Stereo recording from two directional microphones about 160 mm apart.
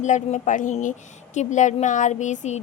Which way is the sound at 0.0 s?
50° left (ahead or behind).